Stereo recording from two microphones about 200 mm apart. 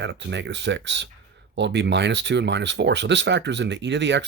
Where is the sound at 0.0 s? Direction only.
60° right (ahead or behind).